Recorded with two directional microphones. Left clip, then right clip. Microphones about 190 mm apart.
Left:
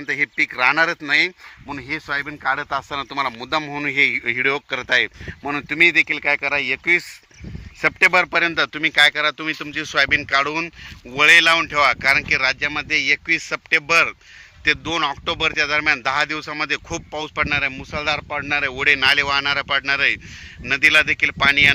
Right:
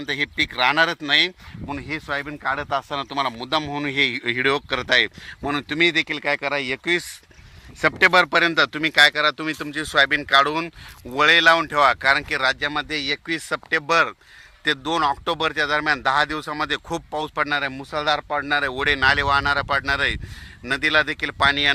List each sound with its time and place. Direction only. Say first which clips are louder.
0.0 s a man's voice: left 3 dB; 60° right (ahead or behind); by 21.7 s 35° right (ahead or behind)